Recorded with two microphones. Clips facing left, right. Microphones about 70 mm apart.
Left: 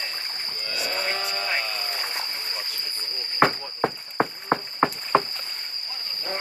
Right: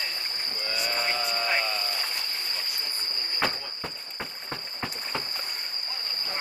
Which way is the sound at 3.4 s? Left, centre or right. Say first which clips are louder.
Left 10 dB; left.